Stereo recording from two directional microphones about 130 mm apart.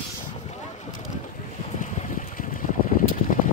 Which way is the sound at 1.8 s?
85° left.